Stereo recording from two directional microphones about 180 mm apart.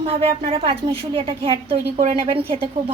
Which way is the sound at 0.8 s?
30° right (ahead or behind).